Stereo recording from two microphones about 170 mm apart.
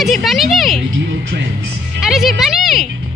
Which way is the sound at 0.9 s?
90° right.